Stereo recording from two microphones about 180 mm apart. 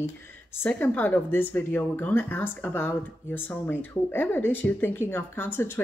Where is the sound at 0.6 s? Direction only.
10° left (ahead or behind).